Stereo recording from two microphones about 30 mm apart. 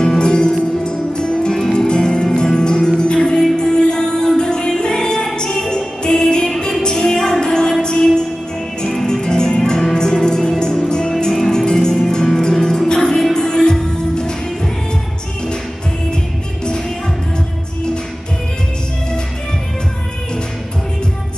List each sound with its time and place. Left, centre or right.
0.2 s music: left